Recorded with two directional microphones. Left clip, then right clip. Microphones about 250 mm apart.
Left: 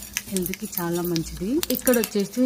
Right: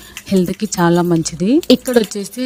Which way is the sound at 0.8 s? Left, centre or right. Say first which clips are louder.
Right 13 dB; right.